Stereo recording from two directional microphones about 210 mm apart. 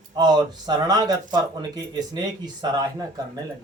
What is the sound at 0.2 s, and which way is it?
Speech, 20° right (ahead or behind).